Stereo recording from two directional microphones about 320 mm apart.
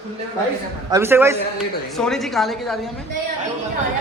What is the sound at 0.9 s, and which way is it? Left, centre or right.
A man's voice, centre.